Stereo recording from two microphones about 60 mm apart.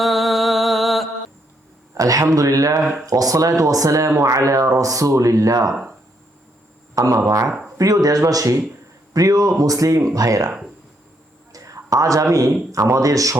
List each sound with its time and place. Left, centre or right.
0.0 s music: centre
2.0 s speech: right
3.1 s speech: right
6.9 s speech: right
10.2 s speech: right
11.5 s a sound: right
12.7 s speech: right